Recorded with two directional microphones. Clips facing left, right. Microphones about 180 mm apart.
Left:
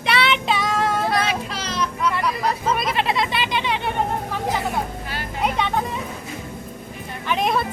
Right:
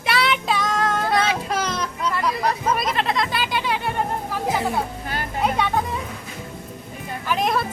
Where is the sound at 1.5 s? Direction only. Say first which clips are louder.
Right 6 dB; 50° right (ahead or behind).